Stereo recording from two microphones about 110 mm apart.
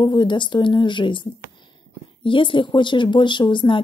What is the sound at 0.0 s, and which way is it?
Speech, 45° left (ahead or behind).